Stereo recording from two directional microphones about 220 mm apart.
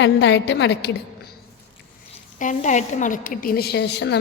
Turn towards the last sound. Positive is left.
turn(degrees=50)  # may be behind; listen again after turning